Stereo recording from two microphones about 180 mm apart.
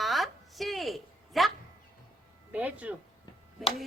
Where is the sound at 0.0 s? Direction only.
Centre (ahead or behind).